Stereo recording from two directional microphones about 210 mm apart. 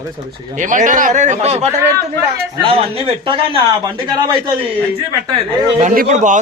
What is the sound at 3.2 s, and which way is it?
Speech, 25° right (ahead or behind).